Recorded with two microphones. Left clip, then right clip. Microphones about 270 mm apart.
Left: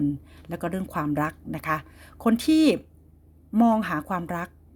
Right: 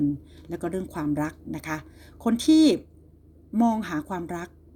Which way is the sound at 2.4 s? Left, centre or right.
Left.